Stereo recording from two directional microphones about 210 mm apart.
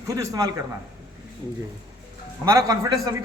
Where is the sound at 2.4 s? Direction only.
15° right (ahead or behind).